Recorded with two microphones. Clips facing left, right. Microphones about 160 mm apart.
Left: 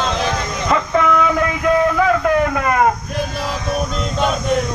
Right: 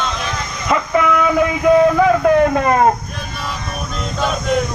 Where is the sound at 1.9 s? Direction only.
20° right (ahead or behind).